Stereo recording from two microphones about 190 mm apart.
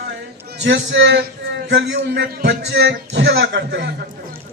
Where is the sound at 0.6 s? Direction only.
75° right (ahead or behind).